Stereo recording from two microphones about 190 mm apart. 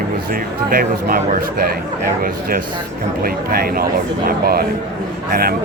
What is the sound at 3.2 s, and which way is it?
Speech, 55° right (ahead or behind).